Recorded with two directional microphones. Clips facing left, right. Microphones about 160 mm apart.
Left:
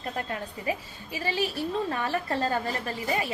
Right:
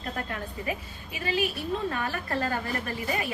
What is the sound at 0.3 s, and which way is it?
A woman's voice, 30° left (ahead or behind).